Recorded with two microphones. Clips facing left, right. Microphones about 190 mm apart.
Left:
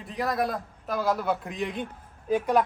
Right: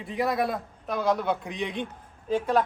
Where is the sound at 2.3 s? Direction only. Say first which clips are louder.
Left 1 dB; 15° left (ahead or behind).